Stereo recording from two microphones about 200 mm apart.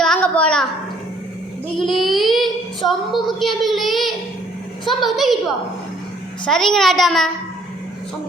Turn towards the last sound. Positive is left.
turn(degrees=0)  # may be behind; listen again after turning